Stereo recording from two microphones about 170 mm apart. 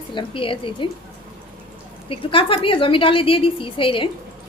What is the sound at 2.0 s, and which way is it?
A woman's voice, 30° left (ahead or behind).